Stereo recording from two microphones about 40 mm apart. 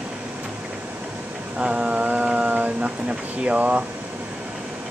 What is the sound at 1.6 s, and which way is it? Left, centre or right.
Mantra, right.